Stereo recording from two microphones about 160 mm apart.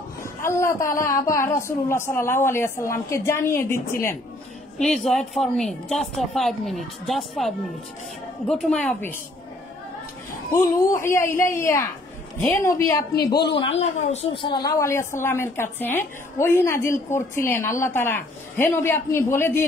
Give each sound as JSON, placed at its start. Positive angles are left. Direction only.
{"t": 0.4, "sound": "a woman's voice", "side_deg": 15}
{"t": 4.7, "sound": "a woman's voice", "side_deg": 5}
{"t": 10.5, "sound": "a woman's voice", "side_deg": 15}
{"t": 13.1, "sound": "a man's voice", "side_deg": 75}
{"t": 13.6, "sound": "a woman's voice", "side_deg": 40}